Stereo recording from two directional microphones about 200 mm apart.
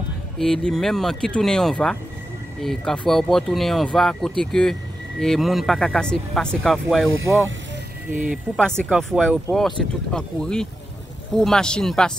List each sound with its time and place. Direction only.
0.4 s speech: centre (ahead or behind)
8.1 s speech: 40° right (ahead or behind)
8.5 s speech: 5° left (ahead or behind)